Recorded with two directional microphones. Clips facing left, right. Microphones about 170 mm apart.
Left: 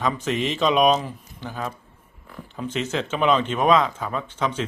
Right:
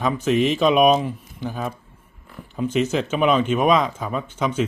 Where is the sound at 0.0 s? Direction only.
10° right (ahead or behind).